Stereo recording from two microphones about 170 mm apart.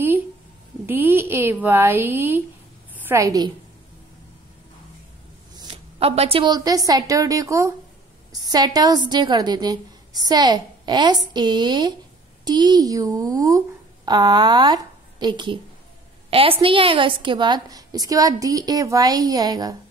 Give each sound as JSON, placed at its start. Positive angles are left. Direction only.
{"t": 0.8, "sound": "a woman's voice", "side_deg": -10}
{"t": 5.7, "sound": "a woman's voice", "side_deg": -35}